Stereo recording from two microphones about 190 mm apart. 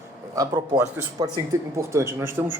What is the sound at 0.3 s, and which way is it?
A man's voice, 20° right (ahead or behind).